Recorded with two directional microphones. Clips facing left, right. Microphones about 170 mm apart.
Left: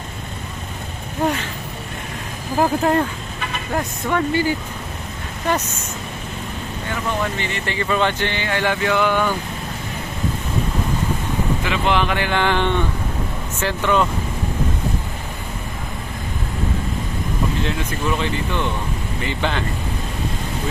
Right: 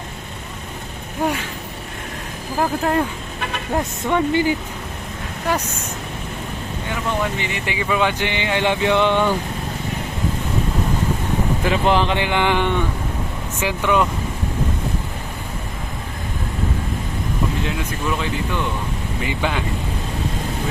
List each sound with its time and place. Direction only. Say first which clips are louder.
2.6 s speech: left 2 dB; centre (ahead or behind)
4.1 s speech: right 2 dB; 20° right (ahead or behind)
7.2 s speech: right 1 dB; 15° right (ahead or behind)
11.6 s speech: right 3 dB; 40° right (ahead or behind)
12.0 s speech: right 1 dB; 20° right (ahead or behind)
17.7 s speech: left 1 dB; 5° right (ahead or behind)